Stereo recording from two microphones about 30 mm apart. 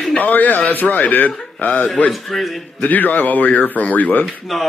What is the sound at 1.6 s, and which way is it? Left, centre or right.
Speech, left.